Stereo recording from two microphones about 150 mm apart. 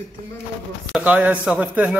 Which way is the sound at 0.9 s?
10° right (ahead or behind).